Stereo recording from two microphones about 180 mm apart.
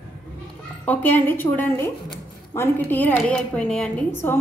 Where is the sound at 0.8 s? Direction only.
10° left (ahead or behind).